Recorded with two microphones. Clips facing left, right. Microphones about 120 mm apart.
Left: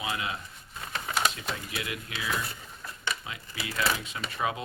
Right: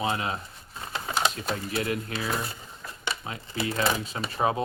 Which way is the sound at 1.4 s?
40° right (ahead or behind).